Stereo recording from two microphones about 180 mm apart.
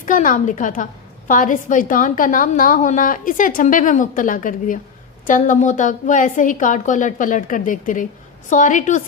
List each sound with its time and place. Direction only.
0.0 s a woman's voice: 50° left (ahead or behind)